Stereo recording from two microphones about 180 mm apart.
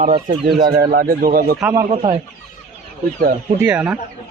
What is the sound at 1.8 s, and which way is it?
Speech, 30° right (ahead or behind).